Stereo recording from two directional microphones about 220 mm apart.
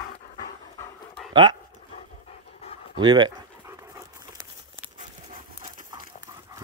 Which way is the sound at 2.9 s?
20° right (ahead or behind).